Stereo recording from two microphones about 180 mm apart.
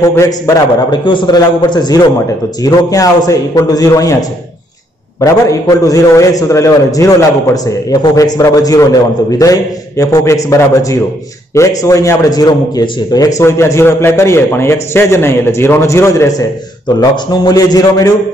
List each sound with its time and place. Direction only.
0.0 s a man's voice: 15° left (ahead or behind)
5.2 s a man's voice: 20° left (ahead or behind)